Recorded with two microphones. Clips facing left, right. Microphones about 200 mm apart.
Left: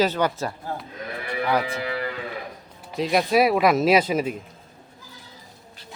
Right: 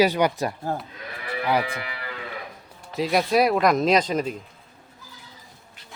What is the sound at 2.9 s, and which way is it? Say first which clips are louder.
Speech: left 1 dB; centre (ahead or behind).